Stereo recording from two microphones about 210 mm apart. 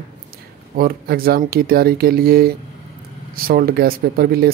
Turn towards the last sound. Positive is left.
turn(degrees=-45)  # may be behind; listen again after turning